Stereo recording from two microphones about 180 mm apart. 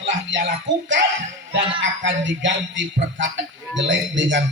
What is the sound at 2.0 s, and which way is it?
Music, 90° right.